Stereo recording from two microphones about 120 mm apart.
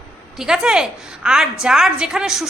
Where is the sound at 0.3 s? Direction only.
5° right (ahead or behind).